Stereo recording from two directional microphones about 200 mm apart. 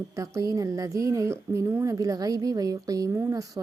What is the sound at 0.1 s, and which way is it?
Speech, 15° right (ahead or behind).